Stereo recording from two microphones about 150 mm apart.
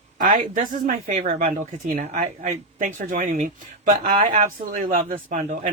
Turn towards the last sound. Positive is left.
turn(degrees=-55)  # may be behind; listen again after turning